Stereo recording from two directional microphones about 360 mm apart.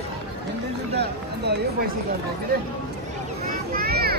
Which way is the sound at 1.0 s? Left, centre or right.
Right.